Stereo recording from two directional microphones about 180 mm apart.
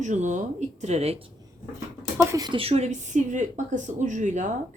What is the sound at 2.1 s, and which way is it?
A woman's voice, 15° right (ahead or behind).